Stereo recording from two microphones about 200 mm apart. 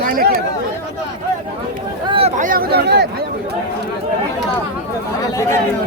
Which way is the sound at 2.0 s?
30° right (ahead or behind).